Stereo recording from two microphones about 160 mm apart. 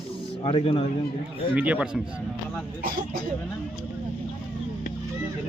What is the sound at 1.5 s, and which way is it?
Speech, 10° right (ahead or behind).